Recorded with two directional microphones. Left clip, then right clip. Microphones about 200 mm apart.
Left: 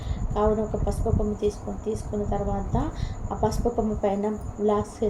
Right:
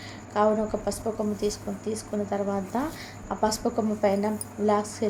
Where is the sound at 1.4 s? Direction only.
60° right (ahead or behind).